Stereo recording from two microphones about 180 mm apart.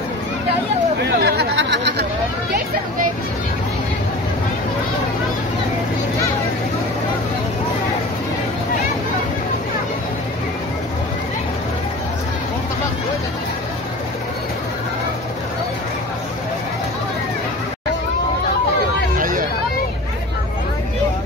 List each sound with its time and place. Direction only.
1.0 s chatter: 65° right (ahead or behind)
19.1 s hubbub: 50° right (ahead or behind)